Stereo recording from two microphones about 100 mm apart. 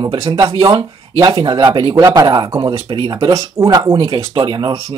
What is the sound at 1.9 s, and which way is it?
Speech, 35° right (ahead or behind).